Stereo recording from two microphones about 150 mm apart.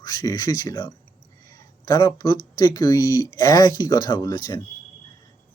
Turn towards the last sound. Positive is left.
turn(degrees=25)  # may be behind; listen again after turning